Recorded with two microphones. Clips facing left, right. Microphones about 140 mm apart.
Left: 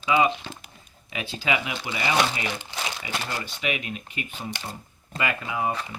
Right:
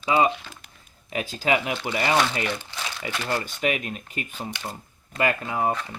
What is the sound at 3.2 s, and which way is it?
Speech, 45° right (ahead or behind).